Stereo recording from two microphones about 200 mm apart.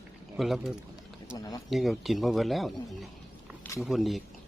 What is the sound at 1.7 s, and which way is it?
Speech, centre (ahead or behind).